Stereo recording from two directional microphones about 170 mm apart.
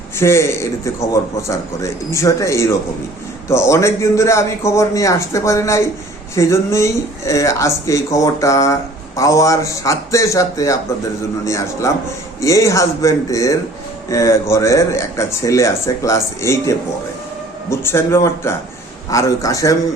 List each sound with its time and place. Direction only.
0.2 s speech: 15° left (ahead or behind)